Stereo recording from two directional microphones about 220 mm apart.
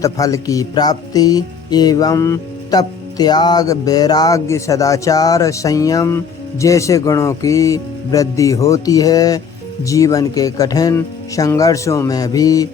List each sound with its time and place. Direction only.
0.0 s music: 15° left (ahead or behind)